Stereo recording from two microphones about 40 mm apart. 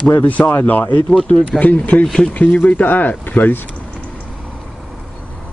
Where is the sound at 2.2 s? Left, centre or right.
Left.